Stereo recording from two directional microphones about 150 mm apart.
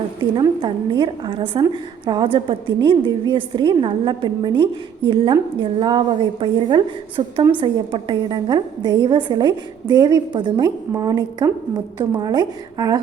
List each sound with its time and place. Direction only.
0.6 s a woman's voice: 30° right (ahead or behind)